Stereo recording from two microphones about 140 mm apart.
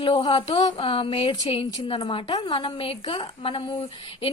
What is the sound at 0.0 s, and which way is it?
A woman's voice, 40° left (ahead or behind).